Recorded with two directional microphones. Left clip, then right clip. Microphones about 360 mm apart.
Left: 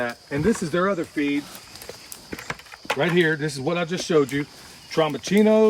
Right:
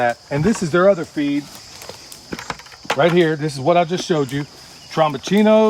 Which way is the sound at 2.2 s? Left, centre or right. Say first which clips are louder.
Right 4 dB; centre.